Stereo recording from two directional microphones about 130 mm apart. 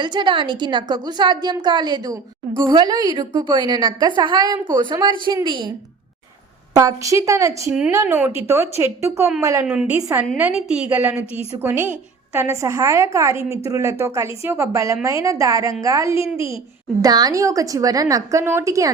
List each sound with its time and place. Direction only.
0.0 s a woman's voice: 35° right (ahead or behind)
6.7 s a woman's voice: 25° right (ahead or behind)
8.0 s a woman's voice: 15° right (ahead or behind)
9.6 s a woman's voice: 10° right (ahead or behind)
10.0 s a woman's voice: 25° right (ahead or behind)
10.3 s a woman's voice: 10° right (ahead or behind)